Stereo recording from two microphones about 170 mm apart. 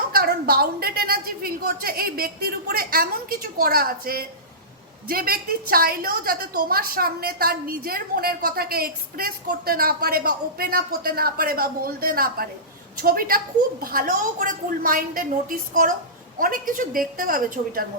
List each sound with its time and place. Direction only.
0.1 s a woman's voice: 65° right (ahead or behind)